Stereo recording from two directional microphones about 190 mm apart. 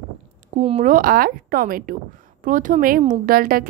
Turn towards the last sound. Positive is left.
turn(degrees=-50)  # may be behind; listen again after turning